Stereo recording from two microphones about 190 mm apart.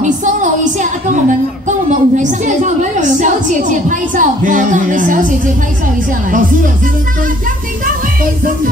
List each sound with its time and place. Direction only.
0.0 s music: 40° right (ahead or behind)
1.9 s a woman's voice: 40° right (ahead or behind)